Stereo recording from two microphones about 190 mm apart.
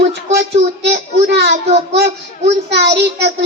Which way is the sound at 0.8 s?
65° right (ahead or behind).